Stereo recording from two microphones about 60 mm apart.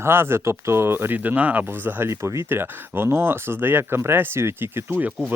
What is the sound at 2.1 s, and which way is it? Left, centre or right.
Speech, right.